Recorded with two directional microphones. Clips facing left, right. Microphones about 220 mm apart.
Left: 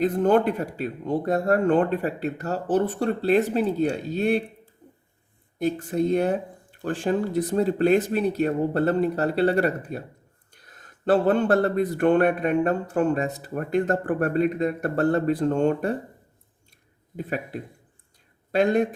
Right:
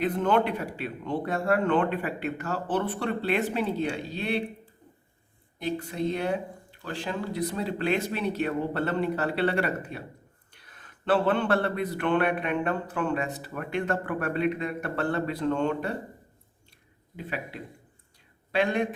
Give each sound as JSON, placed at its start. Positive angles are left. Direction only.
{"t": 0.0, "sound": "speech", "side_deg": 40}
{"t": 5.5, "sound": "speech", "side_deg": 50}
{"t": 17.2, "sound": "speech", "side_deg": 45}